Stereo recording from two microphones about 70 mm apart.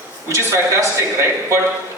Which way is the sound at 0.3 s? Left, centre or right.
Right.